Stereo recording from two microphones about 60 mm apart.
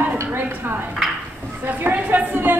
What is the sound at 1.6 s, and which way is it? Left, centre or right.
Speech, right.